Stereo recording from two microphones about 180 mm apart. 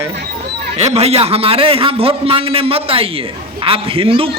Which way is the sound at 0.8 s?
35° right (ahead or behind).